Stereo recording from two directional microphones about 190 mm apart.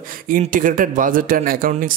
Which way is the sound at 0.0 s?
45° right (ahead or behind).